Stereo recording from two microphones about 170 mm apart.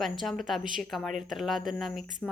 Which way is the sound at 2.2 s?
10° left (ahead or behind).